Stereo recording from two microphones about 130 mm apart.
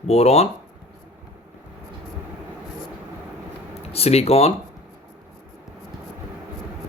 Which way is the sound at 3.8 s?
50° left (ahead or behind).